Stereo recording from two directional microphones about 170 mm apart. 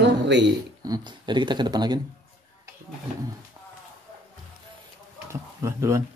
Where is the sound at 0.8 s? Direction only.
25° right (ahead or behind).